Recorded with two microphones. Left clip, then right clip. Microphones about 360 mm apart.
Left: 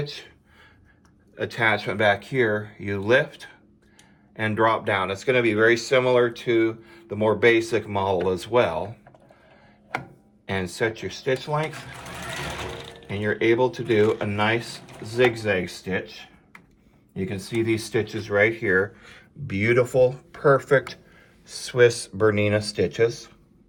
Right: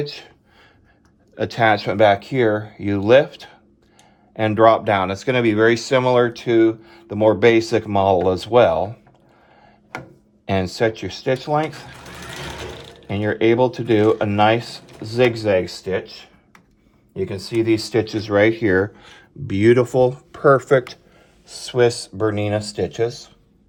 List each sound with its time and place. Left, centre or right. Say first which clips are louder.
0.0 s a sound: right 5 dB; right
1.4 s speech: right 6 dB; right
10.4 s speech: right 6 dB; right
11.7 s sewing machine: even; centre
13.1 s speech: right 4 dB; right
17.5 s speech: right 6 dB; right